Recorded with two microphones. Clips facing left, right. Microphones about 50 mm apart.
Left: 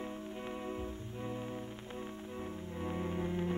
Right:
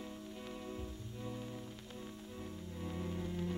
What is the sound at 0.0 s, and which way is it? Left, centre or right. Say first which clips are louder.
Music: left 5 dB; left.